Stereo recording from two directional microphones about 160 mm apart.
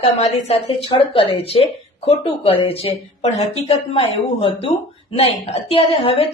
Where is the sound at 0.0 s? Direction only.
40° left (ahead or behind).